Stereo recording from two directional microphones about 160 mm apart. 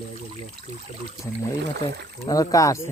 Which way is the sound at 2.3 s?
20° left (ahead or behind).